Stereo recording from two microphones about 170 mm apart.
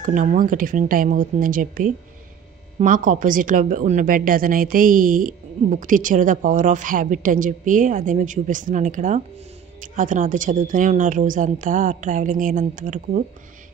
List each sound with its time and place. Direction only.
0.0 s speech: 50° right (ahead or behind)